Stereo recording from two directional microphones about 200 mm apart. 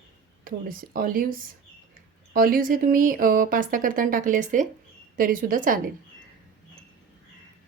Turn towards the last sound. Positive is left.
turn(degrees=-45)  # may be behind; listen again after turning